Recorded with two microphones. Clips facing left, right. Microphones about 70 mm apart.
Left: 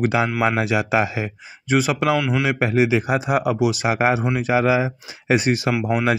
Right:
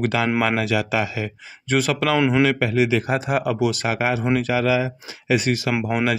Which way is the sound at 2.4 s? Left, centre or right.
Left.